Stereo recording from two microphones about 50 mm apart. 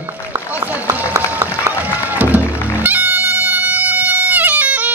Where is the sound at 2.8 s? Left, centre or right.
Right.